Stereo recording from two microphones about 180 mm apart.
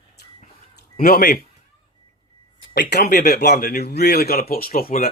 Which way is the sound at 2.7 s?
60° left (ahead or behind).